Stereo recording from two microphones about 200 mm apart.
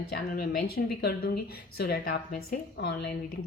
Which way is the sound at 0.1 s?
50° left (ahead or behind).